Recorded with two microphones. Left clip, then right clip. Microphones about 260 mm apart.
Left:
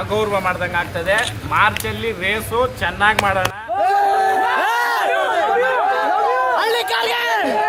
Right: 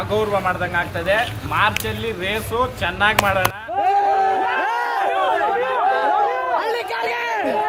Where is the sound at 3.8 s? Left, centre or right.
Left.